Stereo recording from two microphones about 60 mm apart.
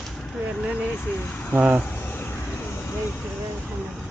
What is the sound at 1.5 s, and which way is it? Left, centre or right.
Speech, right.